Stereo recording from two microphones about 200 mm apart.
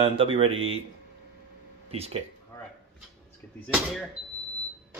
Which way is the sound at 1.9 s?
30° right (ahead or behind).